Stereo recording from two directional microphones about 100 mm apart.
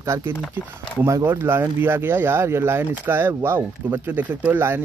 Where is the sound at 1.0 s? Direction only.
30° right (ahead or behind).